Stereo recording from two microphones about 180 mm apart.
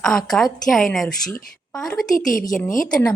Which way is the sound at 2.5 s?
45° left (ahead or behind).